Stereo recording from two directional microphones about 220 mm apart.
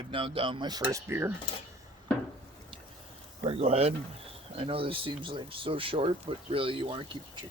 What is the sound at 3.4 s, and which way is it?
Speech, 25° right (ahead or behind).